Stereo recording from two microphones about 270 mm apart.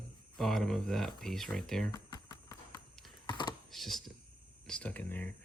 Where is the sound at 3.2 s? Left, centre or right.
Centre.